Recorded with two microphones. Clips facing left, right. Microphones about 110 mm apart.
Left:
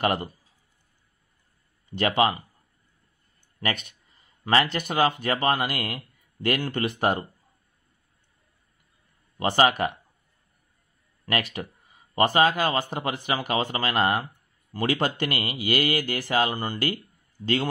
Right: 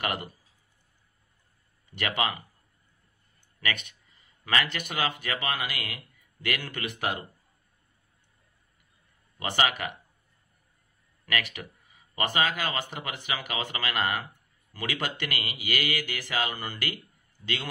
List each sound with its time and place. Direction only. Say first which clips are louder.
0.0 s speech: left 7 dB; 35° left (ahead or behind)
2.0 s speech: left 7 dB; 35° left (ahead or behind)
4.5 s speech: left 6 dB; 35° left (ahead or behind)
9.4 s speech: left 7 dB; 35° left (ahead or behind)
12.2 s speech: left 7 dB; 40° left (ahead or behind)